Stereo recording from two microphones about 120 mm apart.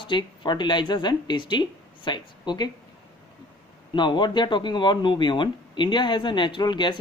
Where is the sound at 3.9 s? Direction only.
40° left (ahead or behind).